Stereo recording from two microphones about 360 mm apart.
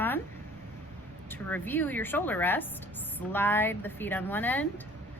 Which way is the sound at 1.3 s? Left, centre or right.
Centre.